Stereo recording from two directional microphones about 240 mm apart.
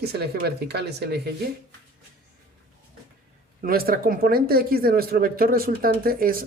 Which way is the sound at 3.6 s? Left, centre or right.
Right.